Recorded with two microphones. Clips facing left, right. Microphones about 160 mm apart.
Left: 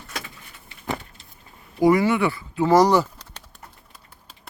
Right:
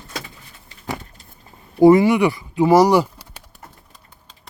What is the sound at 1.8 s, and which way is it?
Speech, 20° right (ahead or behind).